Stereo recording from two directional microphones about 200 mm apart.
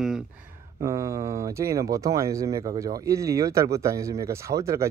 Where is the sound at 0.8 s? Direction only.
15° right (ahead or behind).